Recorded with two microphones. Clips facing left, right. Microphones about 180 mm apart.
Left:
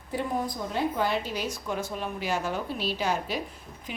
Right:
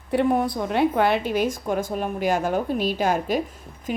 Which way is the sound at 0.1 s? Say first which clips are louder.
Right 9 dB; 65° right (ahead or behind).